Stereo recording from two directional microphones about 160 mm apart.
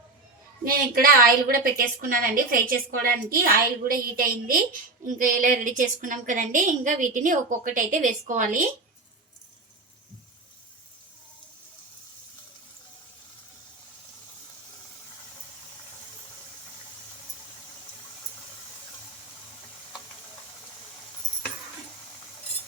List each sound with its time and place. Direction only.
0.6 s a woman's voice: 65° right (ahead or behind)